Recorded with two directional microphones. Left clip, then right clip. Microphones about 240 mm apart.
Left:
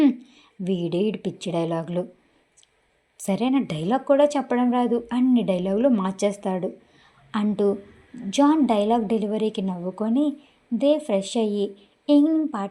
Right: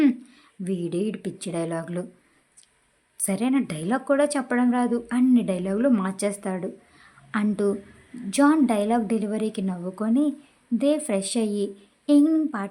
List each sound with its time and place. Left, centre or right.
0.2 s a sound: right
0.6 s speech: centre
3.2 s speech: centre